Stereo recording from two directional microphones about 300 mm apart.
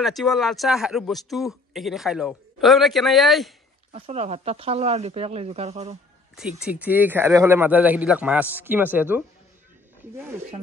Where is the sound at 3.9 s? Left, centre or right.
Right.